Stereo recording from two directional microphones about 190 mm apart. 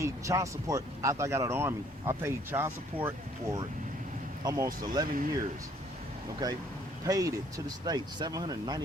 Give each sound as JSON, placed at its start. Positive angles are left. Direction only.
{"t": 0.0, "sound": "speech", "side_deg": -15}
{"t": 6.4, "sound": "speech", "side_deg": -20}